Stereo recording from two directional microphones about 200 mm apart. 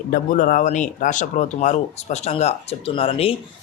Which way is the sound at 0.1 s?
45° left (ahead or behind).